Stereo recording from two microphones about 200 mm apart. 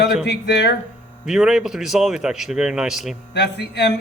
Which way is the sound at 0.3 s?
60° left (ahead or behind).